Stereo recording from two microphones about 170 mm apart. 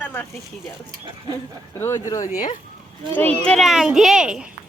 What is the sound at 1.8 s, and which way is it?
Speech, 20° left (ahead or behind).